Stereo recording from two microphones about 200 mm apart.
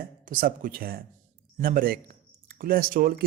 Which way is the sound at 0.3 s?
45° right (ahead or behind).